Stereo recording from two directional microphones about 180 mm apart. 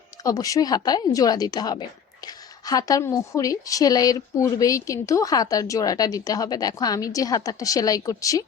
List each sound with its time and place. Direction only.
0.2 s a woman's voice: 20° left (ahead or behind)